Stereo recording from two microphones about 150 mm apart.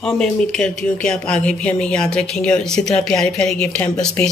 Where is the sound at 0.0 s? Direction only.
5° left (ahead or behind).